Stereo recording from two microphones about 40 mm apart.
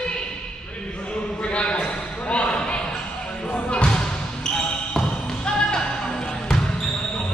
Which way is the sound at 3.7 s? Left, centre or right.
Left.